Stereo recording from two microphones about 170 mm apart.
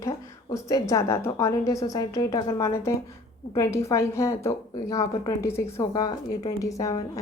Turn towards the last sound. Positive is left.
turn(degrees=20)  # may be behind; listen again after turning